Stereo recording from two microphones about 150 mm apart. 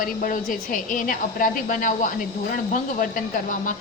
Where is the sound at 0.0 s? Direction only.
65° left (ahead or behind).